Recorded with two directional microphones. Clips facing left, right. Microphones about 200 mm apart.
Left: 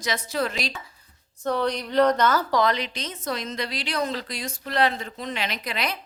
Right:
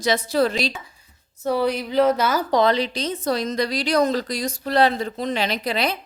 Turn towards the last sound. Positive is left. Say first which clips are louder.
# right 6 dB
turn(degrees=-30)  # may be behind; listen again after turning